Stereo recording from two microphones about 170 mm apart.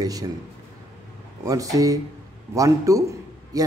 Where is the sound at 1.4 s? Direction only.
20° right (ahead or behind).